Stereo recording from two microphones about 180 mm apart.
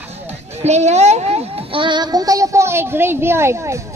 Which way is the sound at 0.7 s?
40° right (ahead or behind).